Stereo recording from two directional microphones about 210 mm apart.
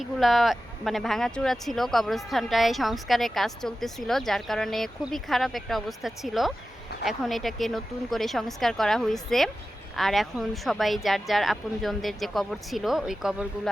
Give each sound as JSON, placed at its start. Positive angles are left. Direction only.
{"t": 0.0, "sound": "speech", "side_deg": 0}